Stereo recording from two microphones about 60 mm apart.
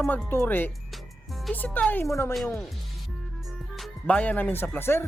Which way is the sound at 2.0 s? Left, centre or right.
Left.